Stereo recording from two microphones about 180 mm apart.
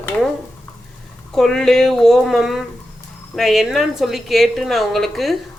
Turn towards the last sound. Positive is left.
turn(degrees=0)  # may be behind; listen again after turning